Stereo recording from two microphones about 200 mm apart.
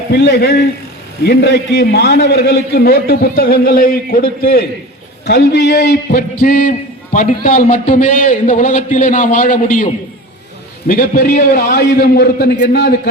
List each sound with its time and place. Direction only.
0.1 s a man's voice: 55° left (ahead or behind)
5.2 s a man's voice: 60° left (ahead or behind)